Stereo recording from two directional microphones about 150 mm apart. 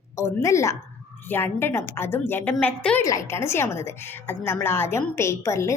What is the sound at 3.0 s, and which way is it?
A woman's voice, 20° left (ahead or behind).